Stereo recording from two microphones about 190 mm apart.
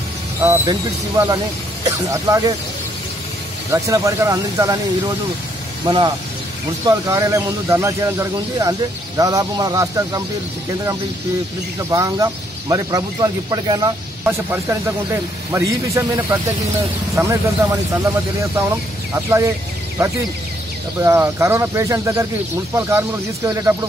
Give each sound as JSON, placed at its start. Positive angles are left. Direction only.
{"t": 0.4, "sound": "speech", "side_deg": -15}
{"t": 3.7, "sound": "speech", "side_deg": -15}
{"t": 5.9, "sound": "speech", "side_deg": -25}
{"t": 11.9, "sound": "speech", "side_deg": -20}
{"t": 14.2, "sound": "speech", "side_deg": -10}